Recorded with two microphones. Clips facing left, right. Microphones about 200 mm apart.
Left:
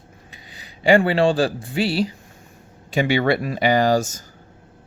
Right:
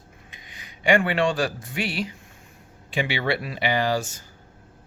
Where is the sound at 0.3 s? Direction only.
35° left (ahead or behind).